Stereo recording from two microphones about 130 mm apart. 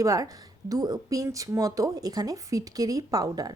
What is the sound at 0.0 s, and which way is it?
Speech, 25° right (ahead or behind).